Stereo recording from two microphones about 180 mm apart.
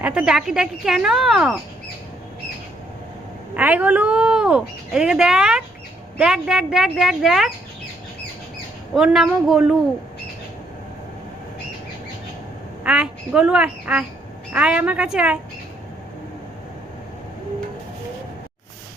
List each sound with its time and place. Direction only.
0.0 s speech: 5° right (ahead or behind)
3.5 s speech: 10° right (ahead or behind)
9.0 s speech: 5° right (ahead or behind)
12.8 s a woman's voice: 5° right (ahead or behind)